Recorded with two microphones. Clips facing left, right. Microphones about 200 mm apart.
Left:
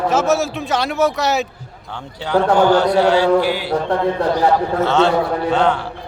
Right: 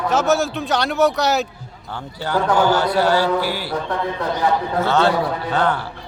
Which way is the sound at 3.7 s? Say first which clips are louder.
Left 6 dB; 35° left (ahead or behind).